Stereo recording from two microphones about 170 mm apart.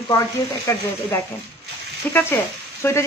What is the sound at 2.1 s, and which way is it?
Speech, 15° left (ahead or behind).